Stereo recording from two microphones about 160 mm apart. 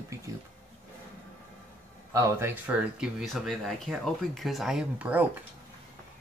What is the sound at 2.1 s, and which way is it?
Speech, 15° right (ahead or behind).